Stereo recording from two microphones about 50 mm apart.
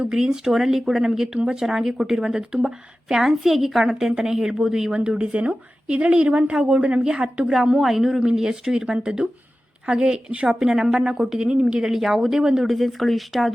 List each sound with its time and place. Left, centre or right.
0.1 s a woman's voice: centre
7.5 s a woman's voice: centre
10.5 s speech: centre
12.6 s a woman's voice: centre